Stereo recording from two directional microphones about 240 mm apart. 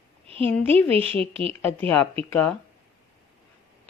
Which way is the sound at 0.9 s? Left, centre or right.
Right.